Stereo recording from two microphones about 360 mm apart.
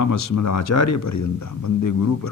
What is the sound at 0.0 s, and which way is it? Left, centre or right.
Speech, left.